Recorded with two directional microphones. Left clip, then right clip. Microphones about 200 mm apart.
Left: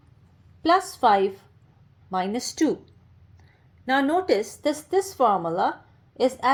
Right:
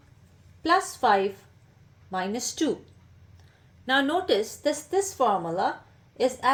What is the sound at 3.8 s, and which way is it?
A woman's voice, 30° left (ahead or behind).